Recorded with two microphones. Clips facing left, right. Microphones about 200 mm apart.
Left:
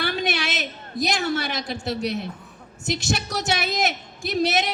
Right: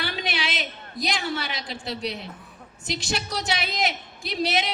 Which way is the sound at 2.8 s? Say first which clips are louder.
Left 4 dB; 45° left (ahead or behind).